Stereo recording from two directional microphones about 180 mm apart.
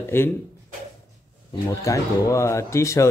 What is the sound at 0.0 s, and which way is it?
Speech, 15° left (ahead or behind).